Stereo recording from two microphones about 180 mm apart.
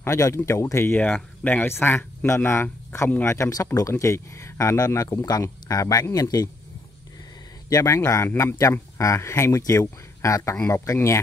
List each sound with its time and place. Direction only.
0.0 s speech: 15° left (ahead or behind)
7.7 s speech: 15° left (ahead or behind)